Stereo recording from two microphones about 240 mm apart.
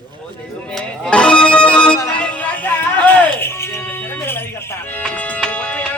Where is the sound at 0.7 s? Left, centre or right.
Centre.